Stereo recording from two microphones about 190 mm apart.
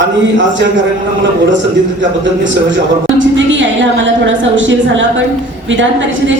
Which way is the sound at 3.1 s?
80° right.